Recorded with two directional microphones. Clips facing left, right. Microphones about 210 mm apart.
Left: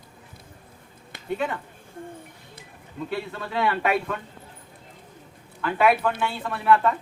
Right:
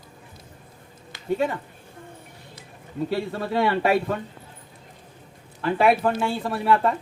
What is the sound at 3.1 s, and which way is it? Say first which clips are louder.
Speech: right 4 dB; 35° right (ahead or behind).